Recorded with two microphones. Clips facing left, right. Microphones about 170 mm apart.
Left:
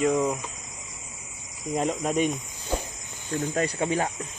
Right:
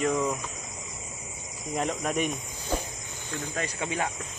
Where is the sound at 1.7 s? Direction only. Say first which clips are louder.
Left 3 dB; 20° left (ahead or behind).